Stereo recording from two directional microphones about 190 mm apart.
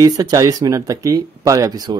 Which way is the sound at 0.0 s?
20° right (ahead or behind).